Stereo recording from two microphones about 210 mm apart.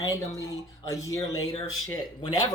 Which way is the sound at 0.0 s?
15° left (ahead or behind).